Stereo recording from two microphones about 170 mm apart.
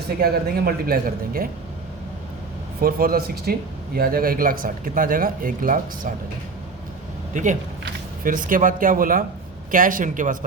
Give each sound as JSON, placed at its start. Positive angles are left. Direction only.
{"t": 0.2, "sound": "speech", "side_deg": -65}
{"t": 2.8, "sound": "speech", "side_deg": -60}
{"t": 7.3, "sound": "speech", "side_deg": -45}